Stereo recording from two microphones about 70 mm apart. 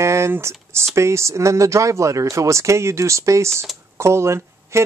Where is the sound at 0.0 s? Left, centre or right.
Right.